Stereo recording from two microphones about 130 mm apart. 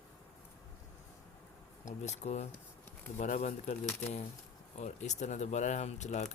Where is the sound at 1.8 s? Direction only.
60° left (ahead or behind).